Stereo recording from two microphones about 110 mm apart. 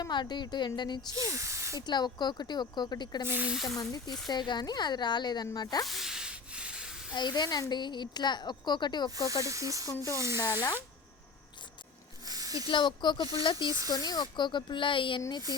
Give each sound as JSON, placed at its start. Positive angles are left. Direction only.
{"t": 0.0, "sound": "a woman's voice", "side_deg": 40}
{"t": 1.1, "sound": "speech", "side_deg": -30}
{"t": 1.9, "sound": "a woman's voice", "side_deg": 40}
{"t": 3.2, "sound": "speech", "side_deg": -15}
{"t": 3.5, "sound": "speech", "side_deg": 0}
{"t": 3.8, "sound": "a woman's voice", "side_deg": 35}
{"t": 5.8, "sound": "sanding", "side_deg": 0}
{"t": 7.1, "sound": "a woman's voice", "side_deg": 40}
{"t": 9.4, "sound": "speech", "side_deg": -30}
{"t": 12.2, "sound": "snake", "side_deg": -35}
{"t": 12.6, "sound": "speech", "side_deg": 45}